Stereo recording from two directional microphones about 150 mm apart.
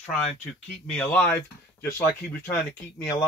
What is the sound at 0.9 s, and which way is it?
Speech, 10° left (ahead or behind).